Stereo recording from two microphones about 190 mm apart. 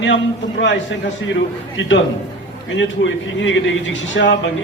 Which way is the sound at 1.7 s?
85° left.